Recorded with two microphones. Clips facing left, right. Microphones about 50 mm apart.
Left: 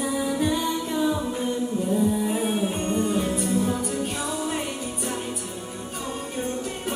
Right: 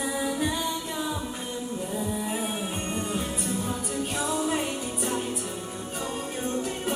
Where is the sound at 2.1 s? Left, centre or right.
Centre.